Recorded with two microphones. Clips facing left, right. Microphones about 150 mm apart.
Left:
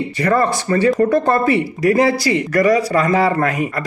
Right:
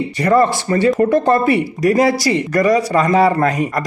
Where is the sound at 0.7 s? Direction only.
25° right (ahead or behind).